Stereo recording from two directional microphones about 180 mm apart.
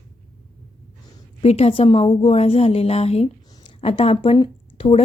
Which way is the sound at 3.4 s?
20° left (ahead or behind).